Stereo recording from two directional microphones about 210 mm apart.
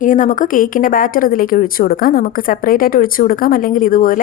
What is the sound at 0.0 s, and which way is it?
A woman's voice, 40° left (ahead or behind).